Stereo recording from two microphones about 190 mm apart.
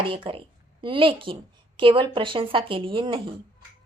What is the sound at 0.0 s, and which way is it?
A woman's voice, 25° right (ahead or behind).